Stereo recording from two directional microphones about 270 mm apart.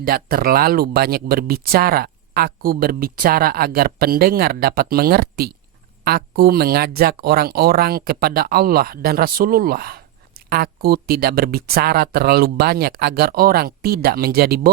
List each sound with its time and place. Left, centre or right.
0.0 s speech: right